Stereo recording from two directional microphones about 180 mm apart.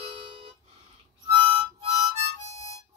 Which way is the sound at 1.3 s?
30° right (ahead or behind).